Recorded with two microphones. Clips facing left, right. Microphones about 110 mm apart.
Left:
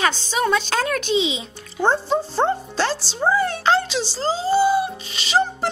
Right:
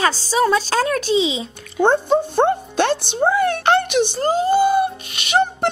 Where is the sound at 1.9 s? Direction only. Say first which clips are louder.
Right 3 dB; 55° right (ahead or behind).